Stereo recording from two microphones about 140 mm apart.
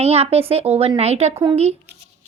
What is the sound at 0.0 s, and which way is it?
A woman's voice, 50° right (ahead or behind).